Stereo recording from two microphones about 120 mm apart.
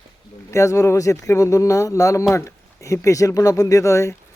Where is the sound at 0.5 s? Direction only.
25° left (ahead or behind).